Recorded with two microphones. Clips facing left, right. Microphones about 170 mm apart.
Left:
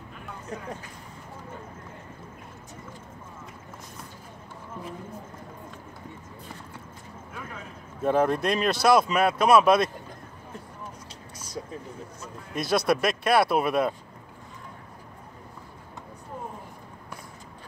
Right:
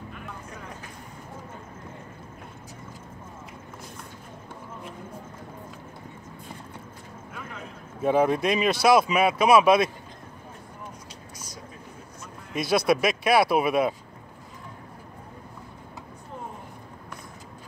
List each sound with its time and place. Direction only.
8.0 s speech: 5° right (ahead or behind)
11.3 s vehicle: 30° left (ahead or behind)
12.5 s speech: centre (ahead or behind)